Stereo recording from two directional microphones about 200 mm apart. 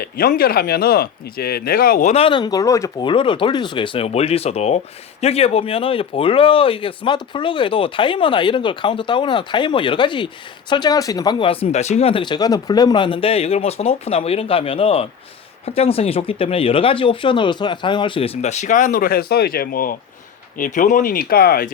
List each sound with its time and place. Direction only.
0.0 s speech: 50° left (ahead or behind)